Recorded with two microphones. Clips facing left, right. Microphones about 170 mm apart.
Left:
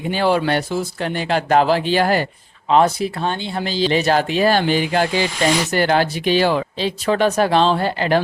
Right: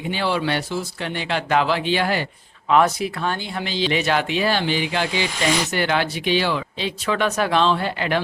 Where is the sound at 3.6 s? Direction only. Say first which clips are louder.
Left 5 dB; 40° left (ahead or behind).